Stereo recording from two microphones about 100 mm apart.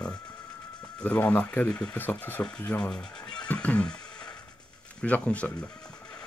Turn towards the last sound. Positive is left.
turn(degrees=15)  # may be behind; listen again after turning